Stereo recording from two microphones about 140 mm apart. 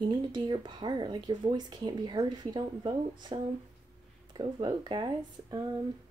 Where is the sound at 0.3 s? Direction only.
35° right (ahead or behind).